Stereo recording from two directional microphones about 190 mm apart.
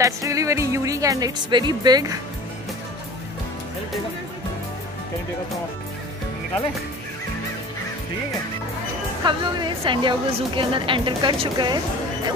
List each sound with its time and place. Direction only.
0.0 s speech: 15° right (ahead or behind)
9.2 s a woman's voice: 25° right (ahead or behind)